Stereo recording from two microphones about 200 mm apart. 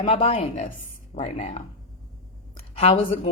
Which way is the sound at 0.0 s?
30° left (ahead or behind).